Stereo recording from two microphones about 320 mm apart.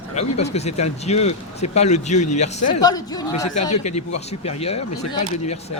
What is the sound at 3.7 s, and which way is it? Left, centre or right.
Speech, left.